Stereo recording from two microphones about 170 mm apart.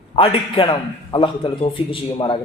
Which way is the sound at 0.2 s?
35° left (ahead or behind).